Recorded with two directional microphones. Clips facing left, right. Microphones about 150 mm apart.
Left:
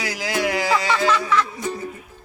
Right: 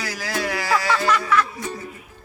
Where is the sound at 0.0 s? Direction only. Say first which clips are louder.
Left 3 dB; 20° left (ahead or behind).